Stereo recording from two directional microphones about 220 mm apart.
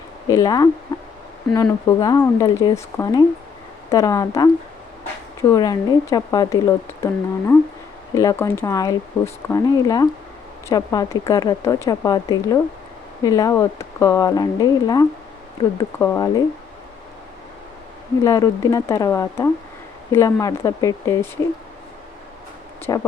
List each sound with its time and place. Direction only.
0.3 s speech: 15° left (ahead or behind)
18.2 s speech: 15° left (ahead or behind)
22.9 s speech: 15° left (ahead or behind)